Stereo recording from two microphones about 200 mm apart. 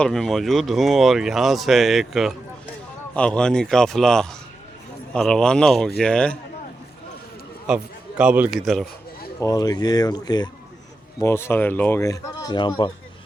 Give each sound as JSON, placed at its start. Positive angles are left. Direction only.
{"t": 0.0, "sound": "speech", "side_deg": 0}
{"t": 7.7, "sound": "speech", "side_deg": -5}
{"t": 9.4, "sound": "speech", "side_deg": 20}